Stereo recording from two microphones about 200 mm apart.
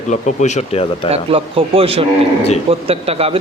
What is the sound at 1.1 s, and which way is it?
Speech, 30° right (ahead or behind).